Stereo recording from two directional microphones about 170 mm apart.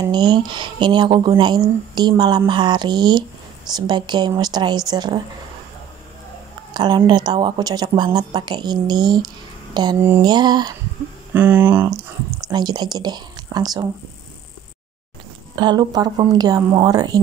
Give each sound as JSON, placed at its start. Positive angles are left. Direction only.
{"t": 0.0, "sound": "a woman's voice", "side_deg": -25}
{"t": 6.7, "sound": "a woman's voice", "side_deg": -25}
{"t": 9.9, "sound": "a sound", "side_deg": -15}
{"t": 10.2, "sound": "a woman's voice", "side_deg": -25}
{"t": 11.3, "sound": "speech", "side_deg": -10}
{"t": 12.4, "sound": "speech", "side_deg": -25}
{"t": 15.5, "sound": "a woman's voice", "side_deg": -25}